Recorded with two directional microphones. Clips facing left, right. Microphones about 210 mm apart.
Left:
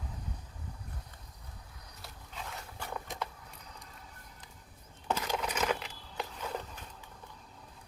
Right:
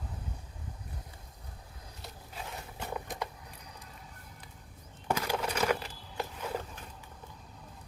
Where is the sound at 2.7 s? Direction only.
20° right (ahead or behind).